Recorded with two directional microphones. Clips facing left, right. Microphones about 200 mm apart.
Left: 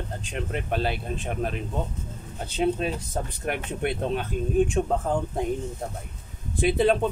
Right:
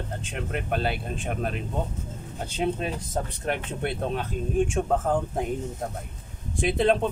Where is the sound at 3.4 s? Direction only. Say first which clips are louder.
Left 3 dB; 15° left (ahead or behind).